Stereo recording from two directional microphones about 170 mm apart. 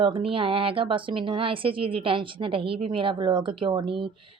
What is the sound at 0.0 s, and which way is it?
A woman's voice, 30° right (ahead or behind).